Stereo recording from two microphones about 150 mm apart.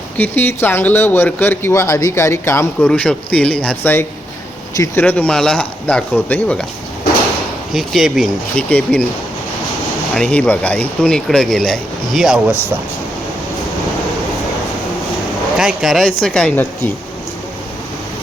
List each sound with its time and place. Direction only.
0.2 s speech: 15° left (ahead or behind)
7.7 s speech: centre (ahead or behind)
10.2 s speech: 5° left (ahead or behind)
15.5 s speech: centre (ahead or behind)